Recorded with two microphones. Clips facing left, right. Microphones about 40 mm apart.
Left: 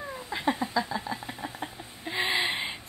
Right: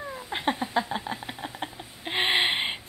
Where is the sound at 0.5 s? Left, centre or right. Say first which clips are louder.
Right 1 dB; right.